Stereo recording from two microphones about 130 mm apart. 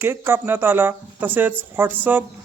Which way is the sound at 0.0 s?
15° right (ahead or behind).